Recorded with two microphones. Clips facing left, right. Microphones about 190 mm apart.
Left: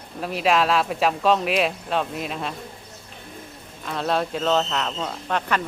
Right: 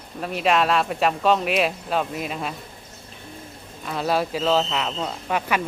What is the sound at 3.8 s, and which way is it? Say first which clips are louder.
Speech: right 1 dB; 5° right (ahead or behind).